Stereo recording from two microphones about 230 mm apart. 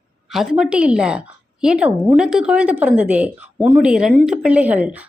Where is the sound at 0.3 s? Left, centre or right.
Centre.